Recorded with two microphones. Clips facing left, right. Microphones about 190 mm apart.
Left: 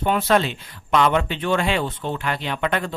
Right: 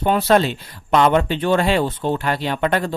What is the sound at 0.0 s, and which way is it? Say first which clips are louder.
Speech: right 3 dB; 35° right (ahead or behind).